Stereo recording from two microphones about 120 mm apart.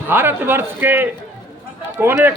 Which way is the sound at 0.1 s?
15° right (ahead or behind).